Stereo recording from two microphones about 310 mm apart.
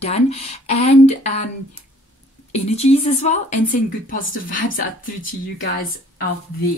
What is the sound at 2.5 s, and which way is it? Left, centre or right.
Speech, left.